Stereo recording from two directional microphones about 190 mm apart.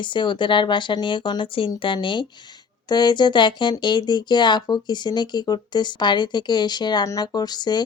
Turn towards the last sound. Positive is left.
turn(degrees=20)  # may be behind; listen again after turning